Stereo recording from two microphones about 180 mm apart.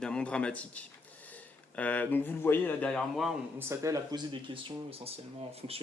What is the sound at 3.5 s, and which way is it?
Speech, 15° right (ahead or behind).